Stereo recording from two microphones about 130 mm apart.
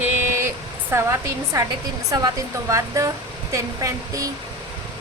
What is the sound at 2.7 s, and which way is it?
Speech, 25° right (ahead or behind).